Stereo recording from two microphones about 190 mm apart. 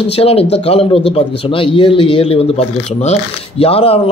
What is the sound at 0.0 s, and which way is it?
Speech, 30° left (ahead or behind).